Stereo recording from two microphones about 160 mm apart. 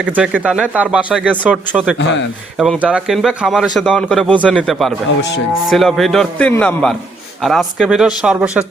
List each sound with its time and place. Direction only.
0.0 s speech: 10° right (ahead or behind)
2.0 s speech: 90° left
2.6 s a man's voice: 5° right (ahead or behind)